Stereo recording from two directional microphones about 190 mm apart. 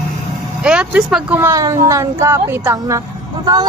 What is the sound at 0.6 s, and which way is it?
Speech, 5° right (ahead or behind).